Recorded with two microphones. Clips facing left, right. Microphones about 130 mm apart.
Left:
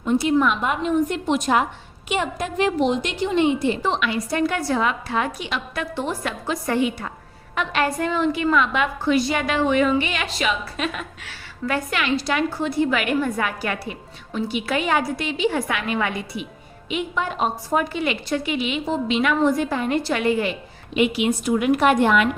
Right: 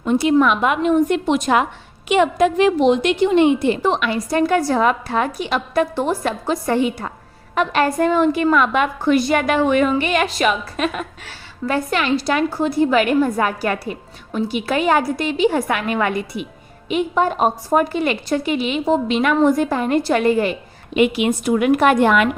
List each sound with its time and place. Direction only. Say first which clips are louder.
0.0 s a woman's voice: right 4 dB; 80° right; by 11.3 s 45° right (ahead or behind)
11.6 s a woman's voice: right 4 dB; 35° right (ahead or behind); by 22.3 s 60° right (ahead or behind)